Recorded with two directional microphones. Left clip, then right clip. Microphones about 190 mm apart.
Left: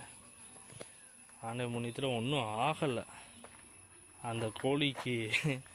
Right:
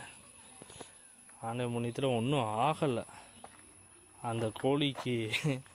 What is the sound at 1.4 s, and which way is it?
Speech, 20° right (ahead or behind).